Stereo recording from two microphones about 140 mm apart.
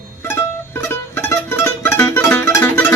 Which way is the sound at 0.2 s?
15° left (ahead or behind).